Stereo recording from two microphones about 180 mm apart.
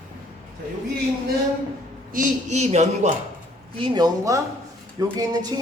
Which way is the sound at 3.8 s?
20° right (ahead or behind).